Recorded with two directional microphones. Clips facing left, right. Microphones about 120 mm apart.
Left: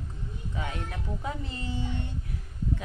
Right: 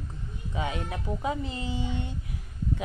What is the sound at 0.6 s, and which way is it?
Speech, 15° right (ahead or behind).